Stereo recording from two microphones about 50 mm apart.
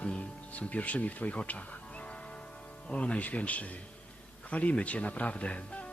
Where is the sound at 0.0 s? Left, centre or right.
Left.